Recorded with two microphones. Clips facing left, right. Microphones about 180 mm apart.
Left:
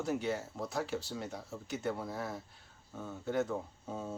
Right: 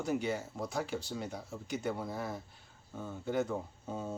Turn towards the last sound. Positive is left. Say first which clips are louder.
# right 1 dB
turn(degrees=0)  # may be behind; listen again after turning